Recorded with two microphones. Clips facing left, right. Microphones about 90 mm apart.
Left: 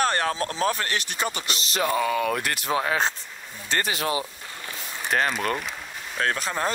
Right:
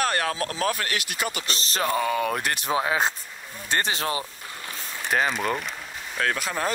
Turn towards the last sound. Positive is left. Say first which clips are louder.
# even
turn(degrees=30)  # may be behind; listen again after turning